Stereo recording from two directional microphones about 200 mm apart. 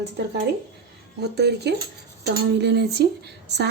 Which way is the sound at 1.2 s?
55° right (ahead or behind).